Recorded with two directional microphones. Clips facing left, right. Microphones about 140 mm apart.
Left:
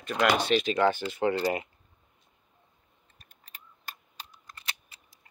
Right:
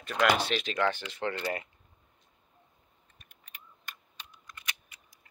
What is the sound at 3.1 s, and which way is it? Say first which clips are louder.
Computer keyboard: left 1 dB; 35° left (ahead or behind).